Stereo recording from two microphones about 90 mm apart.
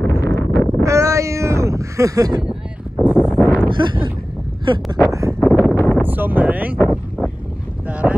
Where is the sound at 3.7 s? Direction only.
60° right (ahead or behind).